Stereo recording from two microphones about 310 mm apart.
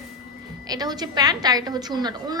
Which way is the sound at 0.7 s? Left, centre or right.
Centre.